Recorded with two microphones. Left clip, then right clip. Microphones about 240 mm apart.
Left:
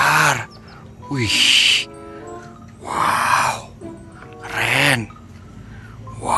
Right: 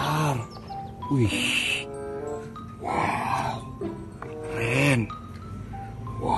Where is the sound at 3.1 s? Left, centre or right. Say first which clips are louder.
Left 10 dB; left.